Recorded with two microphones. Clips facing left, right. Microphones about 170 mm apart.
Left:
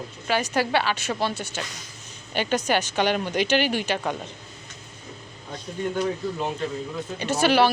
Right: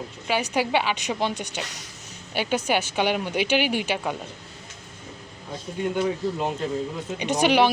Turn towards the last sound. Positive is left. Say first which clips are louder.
# even
turn(degrees=-15)  # may be behind; listen again after turning